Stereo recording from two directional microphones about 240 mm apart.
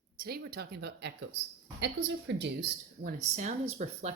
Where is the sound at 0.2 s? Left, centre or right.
Right.